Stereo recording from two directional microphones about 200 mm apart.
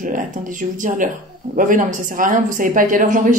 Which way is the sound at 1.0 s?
40° right (ahead or behind).